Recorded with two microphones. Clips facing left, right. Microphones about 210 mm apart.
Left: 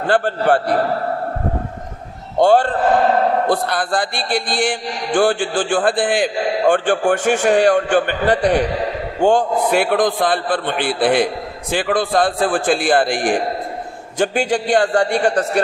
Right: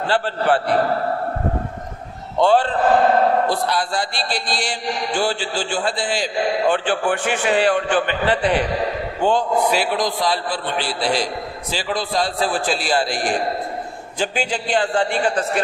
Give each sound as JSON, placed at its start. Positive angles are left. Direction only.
{"t": 0.1, "sound": "speech", "side_deg": 45}
{"t": 2.4, "sound": "speech", "side_deg": 45}